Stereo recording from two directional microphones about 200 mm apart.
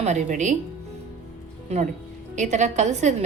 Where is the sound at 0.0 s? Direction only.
35° right (ahead or behind).